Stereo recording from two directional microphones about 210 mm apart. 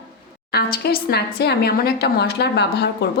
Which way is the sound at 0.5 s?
50° left (ahead or behind).